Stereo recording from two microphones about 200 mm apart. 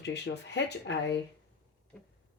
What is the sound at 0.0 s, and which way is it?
Speech, 60° left (ahead or behind).